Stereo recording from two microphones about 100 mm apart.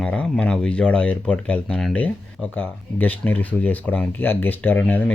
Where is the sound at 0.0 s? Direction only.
10° left (ahead or behind).